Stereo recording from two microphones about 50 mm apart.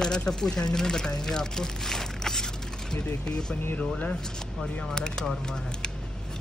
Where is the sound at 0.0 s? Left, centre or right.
Centre.